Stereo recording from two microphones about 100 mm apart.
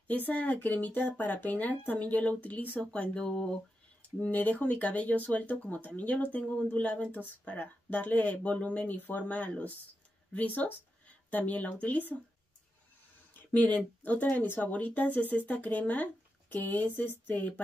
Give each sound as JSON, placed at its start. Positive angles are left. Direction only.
{"t": 0.3, "sound": "speech", "side_deg": 15}
{"t": 13.5, "sound": "speech", "side_deg": 15}